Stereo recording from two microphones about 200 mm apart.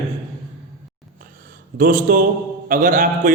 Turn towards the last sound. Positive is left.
turn(degrees=-40)  # may be behind; listen again after turning